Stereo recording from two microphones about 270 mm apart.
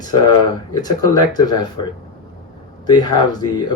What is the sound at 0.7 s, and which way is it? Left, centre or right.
Speech, centre.